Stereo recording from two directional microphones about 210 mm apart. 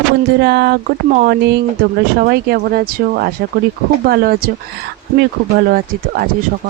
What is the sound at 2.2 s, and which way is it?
Speech, 50° right (ahead or behind).